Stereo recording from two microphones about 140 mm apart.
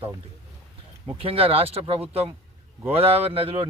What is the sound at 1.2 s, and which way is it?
Speech, 40° right (ahead or behind).